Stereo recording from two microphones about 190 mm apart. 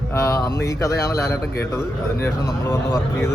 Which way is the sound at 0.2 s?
15° left (ahead or behind).